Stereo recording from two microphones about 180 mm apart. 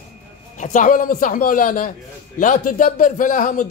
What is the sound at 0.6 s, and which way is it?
A man's voice, 45° left (ahead or behind).